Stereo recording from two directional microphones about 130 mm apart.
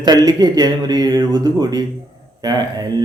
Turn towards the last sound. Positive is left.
turn(degrees=-30)  # may be behind; listen again after turning